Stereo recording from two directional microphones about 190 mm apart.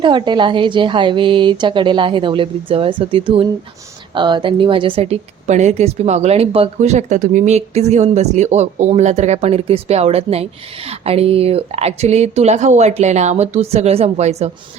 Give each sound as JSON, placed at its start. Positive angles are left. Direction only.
{"t": 0.0, "sound": "a woman's voice", "side_deg": -25}